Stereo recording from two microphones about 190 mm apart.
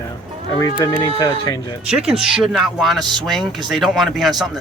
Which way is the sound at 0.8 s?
15° left (ahead or behind).